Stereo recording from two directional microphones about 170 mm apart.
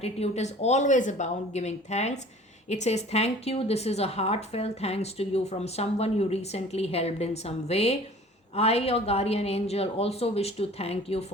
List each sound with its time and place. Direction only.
0.0 s speech: 40° left (ahead or behind)